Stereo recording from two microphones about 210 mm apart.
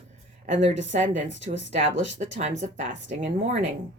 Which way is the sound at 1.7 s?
30° right (ahead or behind).